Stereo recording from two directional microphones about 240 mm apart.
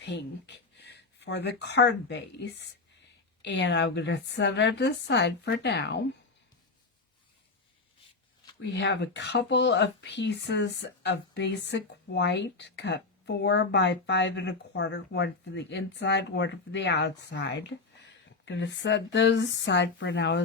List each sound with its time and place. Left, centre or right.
0.0 s speech: left
8.6 s speech: left